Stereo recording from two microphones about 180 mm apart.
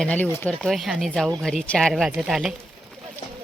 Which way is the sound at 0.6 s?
Centre (ahead or behind).